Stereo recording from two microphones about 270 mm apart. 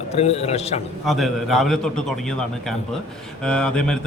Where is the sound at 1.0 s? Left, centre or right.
Centre.